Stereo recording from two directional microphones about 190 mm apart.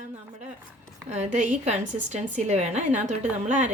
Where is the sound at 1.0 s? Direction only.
35° right (ahead or behind).